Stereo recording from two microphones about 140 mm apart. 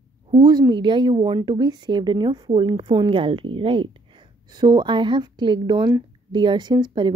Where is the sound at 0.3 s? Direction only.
30° right (ahead or behind).